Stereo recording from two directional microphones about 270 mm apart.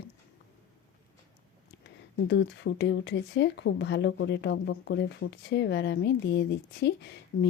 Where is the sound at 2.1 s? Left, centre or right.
Left.